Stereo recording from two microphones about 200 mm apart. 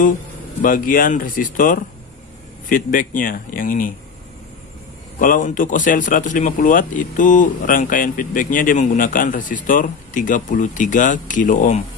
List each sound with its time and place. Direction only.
0.6 s speech: 40° left (ahead or behind)
5.2 s speech: 40° left (ahead or behind)